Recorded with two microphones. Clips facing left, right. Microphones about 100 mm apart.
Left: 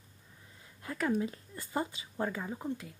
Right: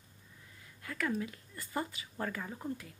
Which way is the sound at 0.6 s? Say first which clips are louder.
Left 3 dB; 25° left (ahead or behind).